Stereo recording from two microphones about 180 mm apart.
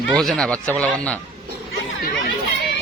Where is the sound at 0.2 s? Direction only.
Centre (ahead or behind).